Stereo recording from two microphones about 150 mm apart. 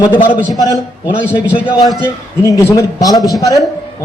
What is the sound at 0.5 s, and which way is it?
Speech, 25° left (ahead or behind).